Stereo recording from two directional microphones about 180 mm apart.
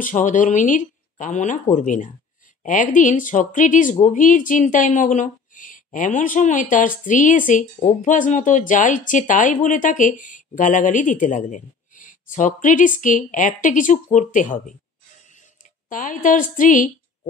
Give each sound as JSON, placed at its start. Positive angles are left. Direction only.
{"t": 0.0, "sound": "speech", "side_deg": 45}
{"t": 15.9, "sound": "a woman's voice", "side_deg": 50}